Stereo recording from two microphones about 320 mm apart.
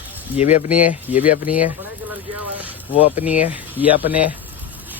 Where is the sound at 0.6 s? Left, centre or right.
Centre.